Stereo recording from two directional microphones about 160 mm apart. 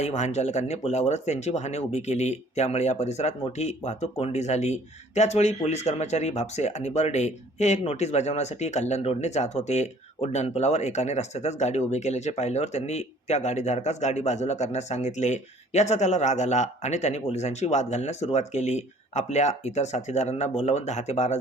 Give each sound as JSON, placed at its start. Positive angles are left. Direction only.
{"t": 0.0, "sound": "speech", "side_deg": 45}